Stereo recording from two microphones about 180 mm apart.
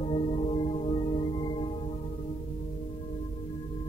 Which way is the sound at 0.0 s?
30° left (ahead or behind).